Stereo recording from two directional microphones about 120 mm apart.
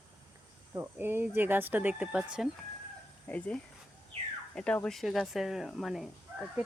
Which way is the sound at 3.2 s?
10° left (ahead or behind).